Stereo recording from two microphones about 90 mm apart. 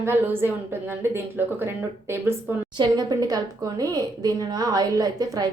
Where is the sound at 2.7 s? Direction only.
55° right (ahead or behind).